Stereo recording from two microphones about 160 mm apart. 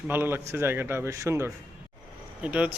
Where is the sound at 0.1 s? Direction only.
15° right (ahead or behind).